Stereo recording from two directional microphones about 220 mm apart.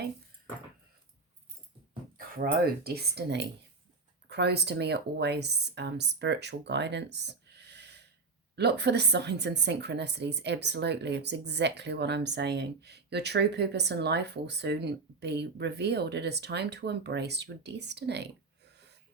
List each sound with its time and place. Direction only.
2.1 s a woman's voice: 40° right (ahead or behind)